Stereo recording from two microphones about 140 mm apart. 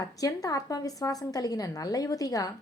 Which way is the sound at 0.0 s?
25° left (ahead or behind).